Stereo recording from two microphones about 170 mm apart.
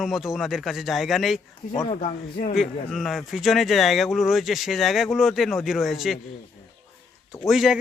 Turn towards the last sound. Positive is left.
turn(degrees=0)  # may be behind; listen again after turning